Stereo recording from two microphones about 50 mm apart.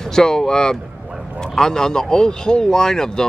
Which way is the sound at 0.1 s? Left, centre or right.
Centre.